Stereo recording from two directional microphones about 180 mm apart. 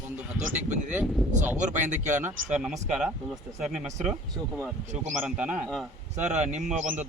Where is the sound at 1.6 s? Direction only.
40° right (ahead or behind).